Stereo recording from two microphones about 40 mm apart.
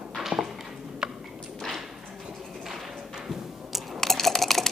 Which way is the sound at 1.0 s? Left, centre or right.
Centre.